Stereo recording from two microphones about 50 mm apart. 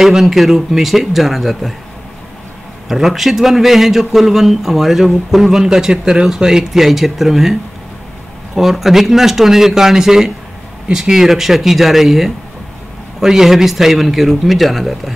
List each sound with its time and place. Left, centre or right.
0.0 s a man's voice: centre
2.9 s a man's voice: centre
8.5 s a man's voice: centre